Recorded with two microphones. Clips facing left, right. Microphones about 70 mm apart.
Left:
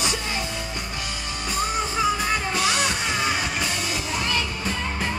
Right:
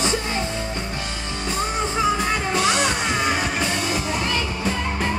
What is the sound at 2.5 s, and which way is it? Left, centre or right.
Music, right.